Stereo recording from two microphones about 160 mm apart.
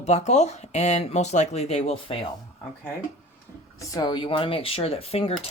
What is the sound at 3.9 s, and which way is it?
Speech, 25° left (ahead or behind).